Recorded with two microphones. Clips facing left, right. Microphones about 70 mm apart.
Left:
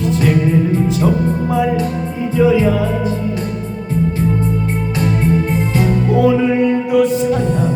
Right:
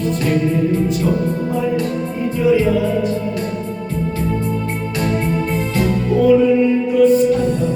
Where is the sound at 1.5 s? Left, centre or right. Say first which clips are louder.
Left 6 dB; left.